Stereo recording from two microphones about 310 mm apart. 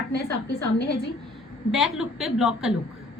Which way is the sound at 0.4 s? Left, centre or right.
Left.